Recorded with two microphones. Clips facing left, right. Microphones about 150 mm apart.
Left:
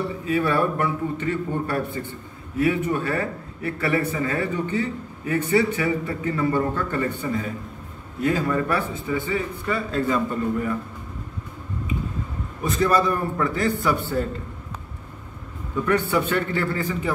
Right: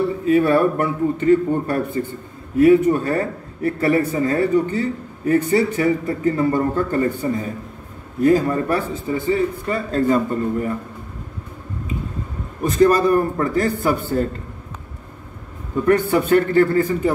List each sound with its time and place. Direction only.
0.3 s a man's voice: 45° right (ahead or behind)
12.6 s a man's voice: 45° right (ahead or behind)
15.8 s a man's voice: 40° right (ahead or behind)